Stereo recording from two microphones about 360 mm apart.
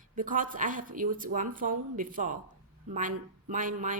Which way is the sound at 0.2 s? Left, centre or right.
Right.